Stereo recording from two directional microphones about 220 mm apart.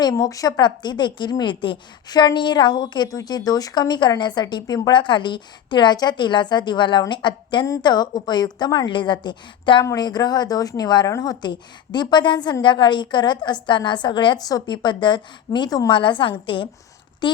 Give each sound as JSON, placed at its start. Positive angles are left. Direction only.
{"t": 0.0, "sound": "a woman's voice", "side_deg": 15}